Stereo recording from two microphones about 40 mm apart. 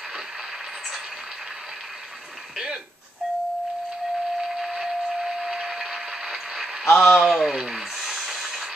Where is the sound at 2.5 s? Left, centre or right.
Centre.